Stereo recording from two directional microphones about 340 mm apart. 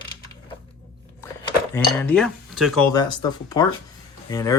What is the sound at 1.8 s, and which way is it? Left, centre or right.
Speech, centre.